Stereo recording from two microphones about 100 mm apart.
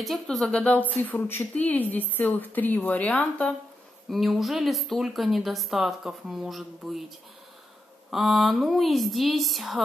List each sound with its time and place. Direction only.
0.0 s speech: centre (ahead or behind)
4.1 s speech: centre (ahead or behind)
8.1 s speech: centre (ahead or behind)